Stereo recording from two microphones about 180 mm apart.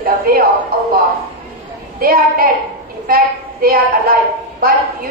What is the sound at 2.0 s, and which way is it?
A woman's voice, 55° right (ahead or behind).